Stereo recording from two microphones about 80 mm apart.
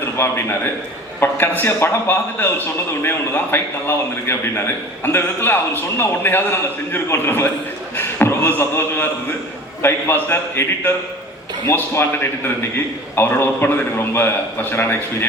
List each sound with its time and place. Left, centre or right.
0.0 s a man's voice: left